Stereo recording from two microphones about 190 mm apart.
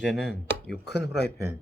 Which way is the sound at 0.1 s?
Centre (ahead or behind).